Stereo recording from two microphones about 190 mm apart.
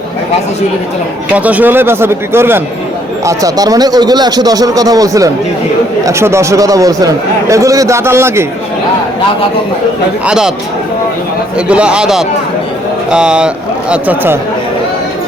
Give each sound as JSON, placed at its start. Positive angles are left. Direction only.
{"t": 1.4, "sound": "a man's voice", "side_deg": -10}
{"t": 10.2, "sound": "a man's voice", "side_deg": -5}
{"t": 11.5, "sound": "a man's voice", "side_deg": -5}